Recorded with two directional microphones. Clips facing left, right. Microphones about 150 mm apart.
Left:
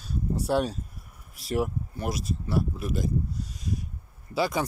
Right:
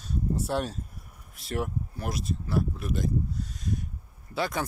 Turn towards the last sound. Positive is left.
turn(degrees=0)  # may be behind; listen again after turning